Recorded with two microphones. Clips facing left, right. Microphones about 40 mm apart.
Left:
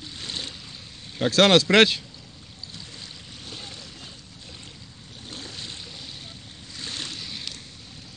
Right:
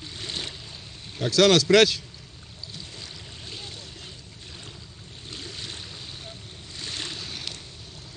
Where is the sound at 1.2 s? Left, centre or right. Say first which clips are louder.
Left 1 dB; left.